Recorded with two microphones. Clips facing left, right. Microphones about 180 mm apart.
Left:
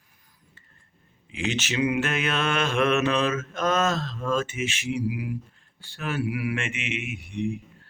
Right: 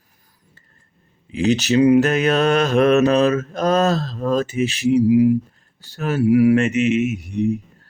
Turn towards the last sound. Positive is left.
turn(degrees=-40)  # may be behind; listen again after turning